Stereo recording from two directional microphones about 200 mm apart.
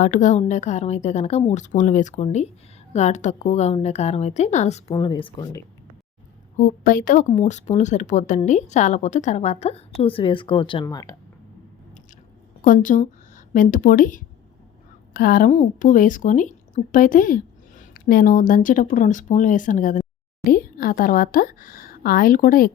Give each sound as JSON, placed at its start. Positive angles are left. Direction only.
{"t": 0.0, "sound": "speech", "side_deg": 40}
{"t": 4.9, "sound": "speech", "side_deg": 25}
{"t": 6.6, "sound": "speech", "side_deg": 45}
{"t": 12.6, "sound": "a woman's voice", "side_deg": 40}